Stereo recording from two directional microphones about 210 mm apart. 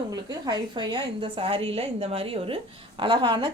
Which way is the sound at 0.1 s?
20° right (ahead or behind).